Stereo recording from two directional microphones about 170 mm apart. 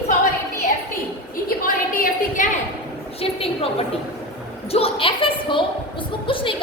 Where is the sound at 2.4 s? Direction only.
50° left (ahead or behind).